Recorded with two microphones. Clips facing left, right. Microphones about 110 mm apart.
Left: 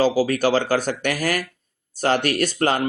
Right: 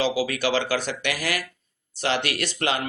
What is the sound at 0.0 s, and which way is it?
Speech, 40° left (ahead or behind).